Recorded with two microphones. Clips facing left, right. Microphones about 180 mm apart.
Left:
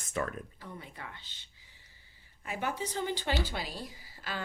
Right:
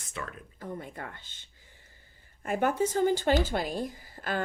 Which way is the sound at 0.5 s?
50° right (ahead or behind).